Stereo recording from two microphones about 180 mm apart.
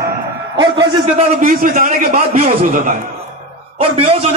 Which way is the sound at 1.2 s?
45° right (ahead or behind).